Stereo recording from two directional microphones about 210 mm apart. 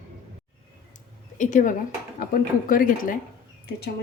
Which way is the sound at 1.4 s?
40° left (ahead or behind).